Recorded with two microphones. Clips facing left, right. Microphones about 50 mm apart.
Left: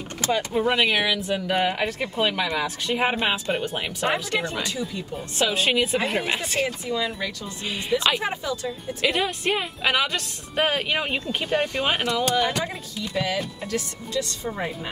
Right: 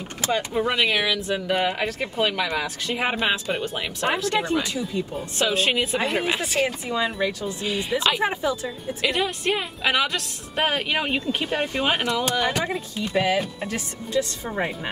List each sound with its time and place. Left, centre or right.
0.5 s a woman's voice: centre
6.9 s speech: right
7.6 s a woman's voice: centre
8.2 s speech: centre
8.6 s a woman's voice: centre
12.6 s speech: right
13.3 s speech: centre